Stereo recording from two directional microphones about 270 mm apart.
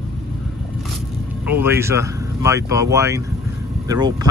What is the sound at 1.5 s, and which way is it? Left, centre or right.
Speech, centre.